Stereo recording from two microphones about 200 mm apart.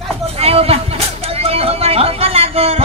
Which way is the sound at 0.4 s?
30° right (ahead or behind).